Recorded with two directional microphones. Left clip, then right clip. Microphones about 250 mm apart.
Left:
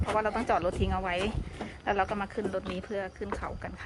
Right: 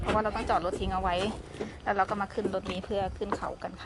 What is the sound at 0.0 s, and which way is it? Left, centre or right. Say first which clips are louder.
Speech: even; centre.